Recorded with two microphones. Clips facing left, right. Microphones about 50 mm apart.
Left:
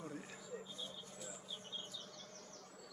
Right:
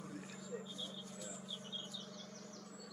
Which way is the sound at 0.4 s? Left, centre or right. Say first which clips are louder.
Right 2 dB; centre.